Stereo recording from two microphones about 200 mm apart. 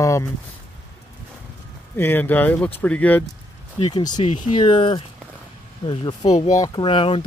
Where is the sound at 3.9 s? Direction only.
20° left (ahead or behind).